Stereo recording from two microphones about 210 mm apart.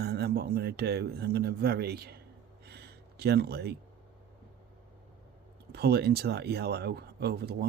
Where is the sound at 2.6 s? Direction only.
50° right (ahead or behind).